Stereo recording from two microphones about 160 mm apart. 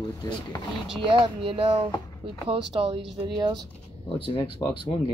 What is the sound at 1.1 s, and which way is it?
Speech, 30° right (ahead or behind).